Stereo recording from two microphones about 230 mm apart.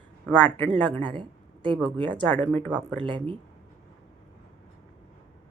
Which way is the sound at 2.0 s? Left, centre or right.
Centre.